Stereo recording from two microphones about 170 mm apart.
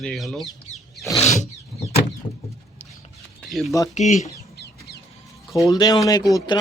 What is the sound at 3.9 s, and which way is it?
Speech, 45° left (ahead or behind).